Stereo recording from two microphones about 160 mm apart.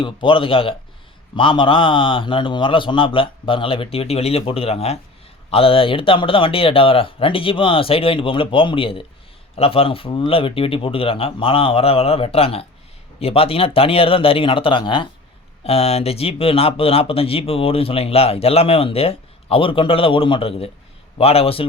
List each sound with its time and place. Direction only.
0.0 s speech: 30° left (ahead or behind)